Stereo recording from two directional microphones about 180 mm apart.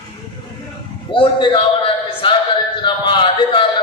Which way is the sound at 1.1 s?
30° left (ahead or behind).